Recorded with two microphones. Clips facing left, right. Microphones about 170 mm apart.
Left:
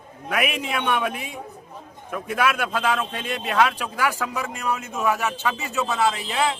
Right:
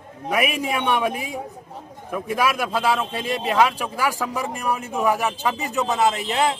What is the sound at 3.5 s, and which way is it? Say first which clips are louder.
Speech: right 1 dB; 10° right (ahead or behind).